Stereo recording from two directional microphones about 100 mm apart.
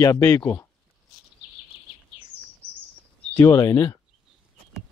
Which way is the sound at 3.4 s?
30° left (ahead or behind).